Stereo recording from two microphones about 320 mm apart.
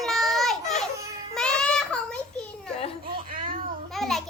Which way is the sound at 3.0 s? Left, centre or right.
Right.